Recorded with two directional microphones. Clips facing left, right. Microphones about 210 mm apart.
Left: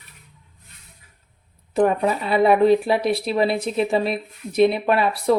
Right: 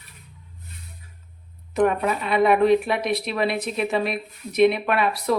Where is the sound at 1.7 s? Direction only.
30° left (ahead or behind).